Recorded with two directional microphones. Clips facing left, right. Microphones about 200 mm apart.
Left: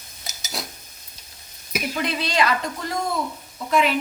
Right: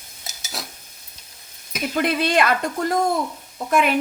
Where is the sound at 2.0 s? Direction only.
50° right (ahead or behind).